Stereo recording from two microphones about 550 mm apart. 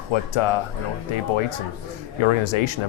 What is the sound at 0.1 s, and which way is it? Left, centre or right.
Speech, left.